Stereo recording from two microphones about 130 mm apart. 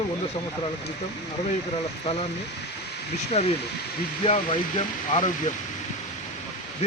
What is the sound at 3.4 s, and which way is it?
Speech, 55° left (ahead or behind).